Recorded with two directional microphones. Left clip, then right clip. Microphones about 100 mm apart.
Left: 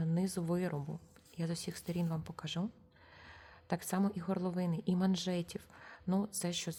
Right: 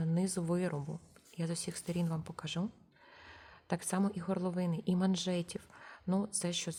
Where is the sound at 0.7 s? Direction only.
15° right (ahead or behind).